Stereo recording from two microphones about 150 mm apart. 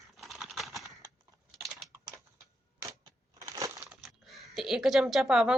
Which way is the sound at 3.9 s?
Centre (ahead or behind).